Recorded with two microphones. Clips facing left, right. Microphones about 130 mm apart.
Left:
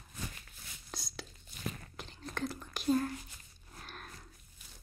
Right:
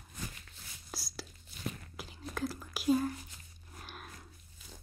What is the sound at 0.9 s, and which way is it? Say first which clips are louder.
Whispering: right 1 dB; 5° right (ahead or behind).